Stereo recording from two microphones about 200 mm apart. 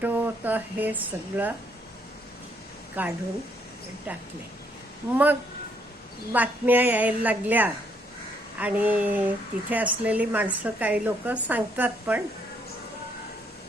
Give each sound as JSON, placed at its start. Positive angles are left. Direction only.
{"t": 0.0, "sound": "a sound", "side_deg": -10}
{"t": 3.0, "sound": "speech", "side_deg": -10}
{"t": 5.1, "sound": "speech", "side_deg": -10}